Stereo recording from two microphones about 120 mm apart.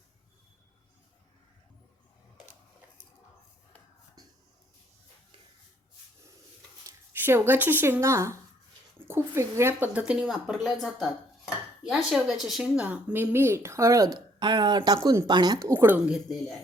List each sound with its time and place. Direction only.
6.8 s speech: 20° right (ahead or behind)
10.0 s speech: 5° right (ahead or behind); by 14.9 s 35° right (ahead or behind)
15.0 s speech: 25° right (ahead or behind)
15.3 s speech: 35° right (ahead or behind)
15.6 s speech: 20° right (ahead or behind)
16.0 s speech: 10° right (ahead or behind)